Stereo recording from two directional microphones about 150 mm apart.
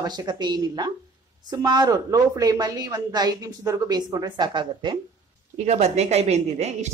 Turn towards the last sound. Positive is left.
turn(degrees=-50)  # may be behind; listen again after turning